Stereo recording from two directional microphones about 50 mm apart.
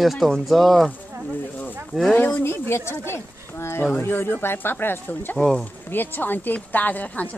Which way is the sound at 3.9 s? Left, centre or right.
Left.